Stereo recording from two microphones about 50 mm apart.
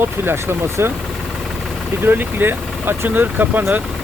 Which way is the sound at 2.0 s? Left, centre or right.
Right.